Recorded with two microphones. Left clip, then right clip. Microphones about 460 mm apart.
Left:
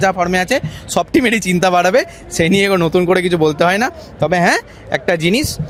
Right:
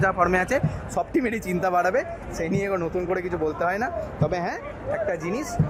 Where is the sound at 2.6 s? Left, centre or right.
Left.